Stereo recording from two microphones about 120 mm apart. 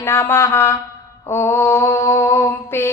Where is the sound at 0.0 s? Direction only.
20° left (ahead or behind).